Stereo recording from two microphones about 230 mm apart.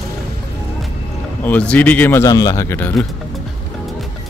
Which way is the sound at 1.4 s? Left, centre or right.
Centre.